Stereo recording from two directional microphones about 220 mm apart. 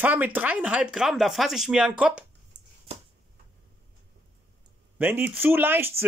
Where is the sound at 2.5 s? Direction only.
50° right (ahead or behind).